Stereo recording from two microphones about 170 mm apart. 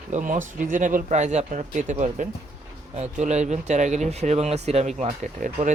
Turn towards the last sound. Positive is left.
turn(degrees=-45)  # may be behind; listen again after turning